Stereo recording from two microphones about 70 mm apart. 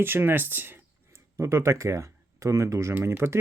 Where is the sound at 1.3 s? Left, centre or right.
Right.